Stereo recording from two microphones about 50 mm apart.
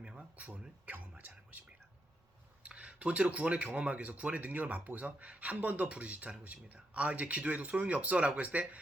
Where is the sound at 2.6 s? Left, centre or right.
Right.